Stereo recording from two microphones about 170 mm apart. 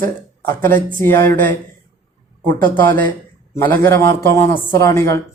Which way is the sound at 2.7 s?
10° left (ahead or behind).